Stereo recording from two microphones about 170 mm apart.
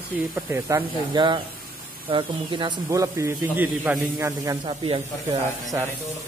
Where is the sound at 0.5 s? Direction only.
15° right (ahead or behind).